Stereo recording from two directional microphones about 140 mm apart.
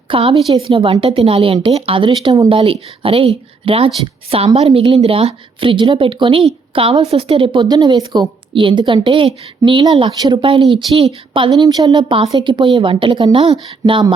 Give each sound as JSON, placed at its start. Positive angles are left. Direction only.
{"t": 0.1, "sound": "a woman's voice", "side_deg": -40}